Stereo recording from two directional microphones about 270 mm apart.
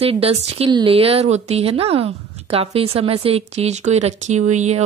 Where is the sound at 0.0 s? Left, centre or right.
Right.